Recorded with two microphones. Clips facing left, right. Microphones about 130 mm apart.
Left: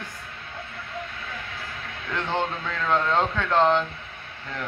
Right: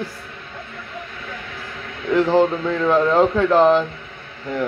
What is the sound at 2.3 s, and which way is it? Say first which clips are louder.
Speech: right 8 dB; 35° right (ahead or behind).